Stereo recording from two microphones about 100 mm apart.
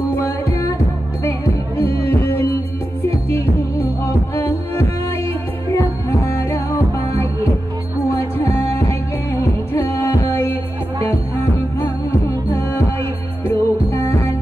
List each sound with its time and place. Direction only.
0.1 s music: 25° left (ahead or behind)
8.4 s music: 25° left (ahead or behind)
11.8 s music: 25° left (ahead or behind)